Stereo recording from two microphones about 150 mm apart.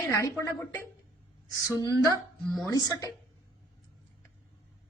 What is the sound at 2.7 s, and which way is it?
Speech, 25° left (ahead or behind).